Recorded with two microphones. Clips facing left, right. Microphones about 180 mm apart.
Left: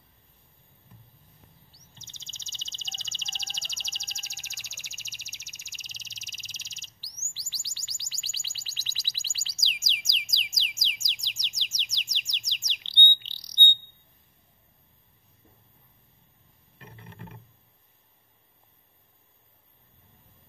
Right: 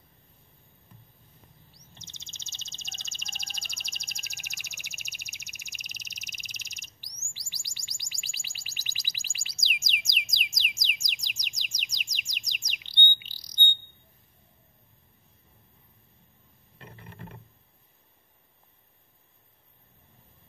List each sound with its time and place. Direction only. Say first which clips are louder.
2.0 s chirp: right 2 dB; 15° right (ahead or behind)
2.7 s bird: left 2 dB; 15° right (ahead or behind)
3.2 s chirp: even; 10° right (ahead or behind)
11.0 s bird: right 1 dB; 15° right (ahead or behind)